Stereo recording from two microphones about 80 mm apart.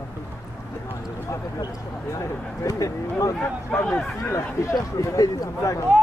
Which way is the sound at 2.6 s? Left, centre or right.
Left.